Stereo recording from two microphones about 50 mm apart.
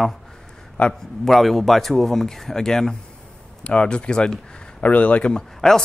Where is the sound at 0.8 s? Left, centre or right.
Left.